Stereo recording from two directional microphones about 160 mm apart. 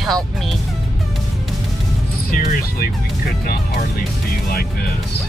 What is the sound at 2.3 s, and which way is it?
Speech, 65° left (ahead or behind).